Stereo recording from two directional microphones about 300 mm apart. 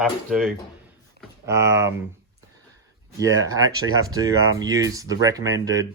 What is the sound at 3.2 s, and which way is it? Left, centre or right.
Speech, centre.